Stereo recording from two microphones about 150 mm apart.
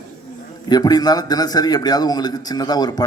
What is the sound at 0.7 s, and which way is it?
A man's voice, 25° left (ahead or behind).